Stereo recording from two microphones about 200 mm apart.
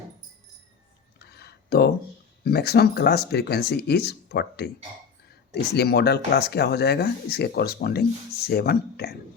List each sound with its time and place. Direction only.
1.2 s a sound: 55° left (ahead or behind)
2.4 s speech: 55° left (ahead or behind)
5.7 s speech: 55° left (ahead or behind)